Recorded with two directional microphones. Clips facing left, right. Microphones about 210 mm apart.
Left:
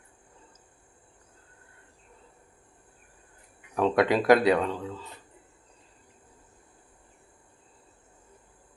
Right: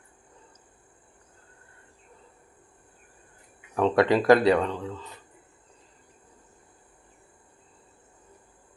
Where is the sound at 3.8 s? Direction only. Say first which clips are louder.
Right 2 dB; 5° left (ahead or behind).